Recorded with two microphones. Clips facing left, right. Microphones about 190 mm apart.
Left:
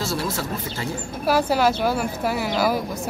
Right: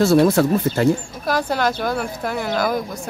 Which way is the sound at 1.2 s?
10° left (ahead or behind).